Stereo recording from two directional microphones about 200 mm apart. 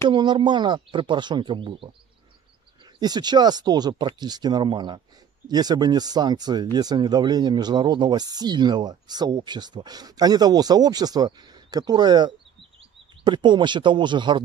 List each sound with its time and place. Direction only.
0.1 s speech: 20° right (ahead or behind)
3.0 s speech: 20° right (ahead or behind)